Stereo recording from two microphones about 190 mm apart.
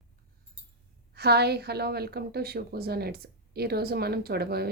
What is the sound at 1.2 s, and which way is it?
A woman's voice, 60° right (ahead or behind).